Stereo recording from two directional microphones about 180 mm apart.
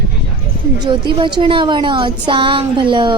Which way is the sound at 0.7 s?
25° right (ahead or behind).